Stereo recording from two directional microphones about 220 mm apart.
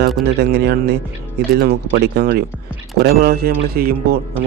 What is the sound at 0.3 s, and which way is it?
Speech, 50° right (ahead or behind).